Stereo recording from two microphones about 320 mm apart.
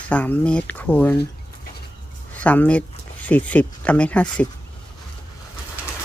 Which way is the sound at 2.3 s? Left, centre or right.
Centre.